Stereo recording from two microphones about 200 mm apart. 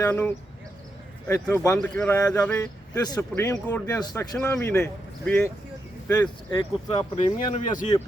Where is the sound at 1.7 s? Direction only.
5° left (ahead or behind).